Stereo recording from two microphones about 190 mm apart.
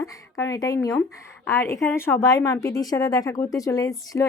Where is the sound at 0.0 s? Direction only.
15° left (ahead or behind).